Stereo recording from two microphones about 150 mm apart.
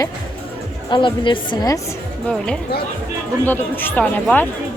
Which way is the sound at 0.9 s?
30° left (ahead or behind).